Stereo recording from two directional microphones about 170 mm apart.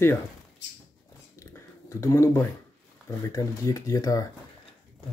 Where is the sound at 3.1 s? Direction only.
20° left (ahead or behind).